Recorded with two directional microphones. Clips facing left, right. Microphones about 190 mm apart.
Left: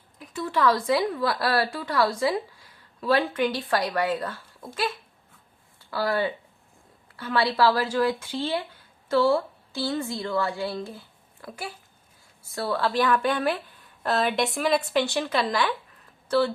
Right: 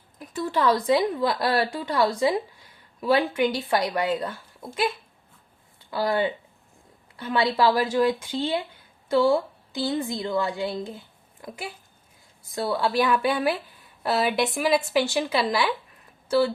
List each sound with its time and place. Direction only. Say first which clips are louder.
0.3 s a woman's voice: right 1 dB; 30° right (ahead or behind); by 4.9 s 15° right (ahead or behind)
5.9 s a woman's voice: right 1 dB; 20° right (ahead or behind)